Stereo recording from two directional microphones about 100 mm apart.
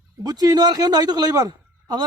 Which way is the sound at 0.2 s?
40° right (ahead or behind).